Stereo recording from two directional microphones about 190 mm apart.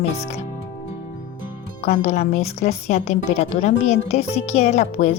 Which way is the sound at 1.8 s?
40° left (ahead or behind).